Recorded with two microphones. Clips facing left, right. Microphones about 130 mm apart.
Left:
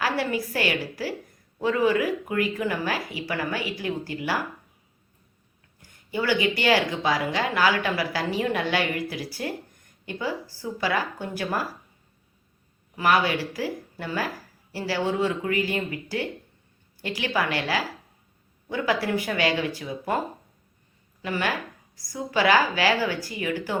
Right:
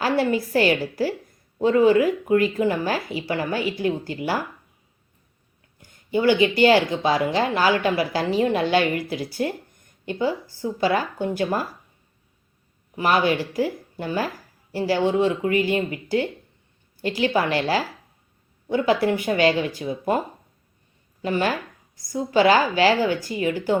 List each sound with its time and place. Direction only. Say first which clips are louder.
0.0 s a woman's voice: right 5 dB; 25° right (ahead or behind)
5.8 s a woman's voice: right 8 dB; 25° right (ahead or behind)
13.0 s a woman's voice: right 2 dB; 25° right (ahead or behind)